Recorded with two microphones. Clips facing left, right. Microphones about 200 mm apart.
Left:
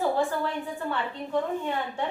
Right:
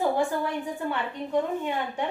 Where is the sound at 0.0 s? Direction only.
15° right (ahead or behind).